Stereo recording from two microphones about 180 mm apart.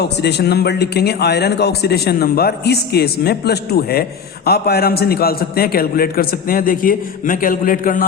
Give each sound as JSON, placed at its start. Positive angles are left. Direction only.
{"t": 0.0, "sound": "a man's voice", "side_deg": 65}